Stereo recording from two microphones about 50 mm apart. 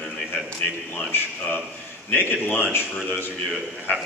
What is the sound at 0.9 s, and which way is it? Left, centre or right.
A man's voice, left.